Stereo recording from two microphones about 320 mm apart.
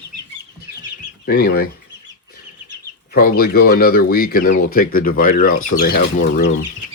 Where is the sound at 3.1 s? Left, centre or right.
Left.